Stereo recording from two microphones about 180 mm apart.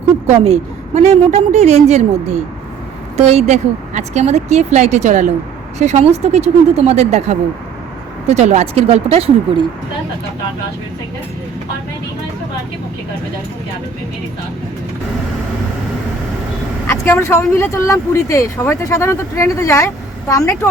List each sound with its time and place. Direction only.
0.3 s speech: 35° right (ahead or behind)
16.8 s speech: 15° left (ahead or behind)